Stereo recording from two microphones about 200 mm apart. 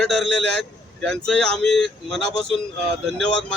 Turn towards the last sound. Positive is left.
turn(degrees=0)  # may be behind; listen again after turning